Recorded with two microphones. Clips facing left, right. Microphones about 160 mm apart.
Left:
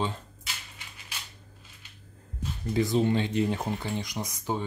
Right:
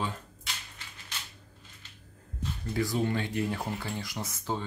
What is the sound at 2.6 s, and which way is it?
Speech, 20° left (ahead or behind).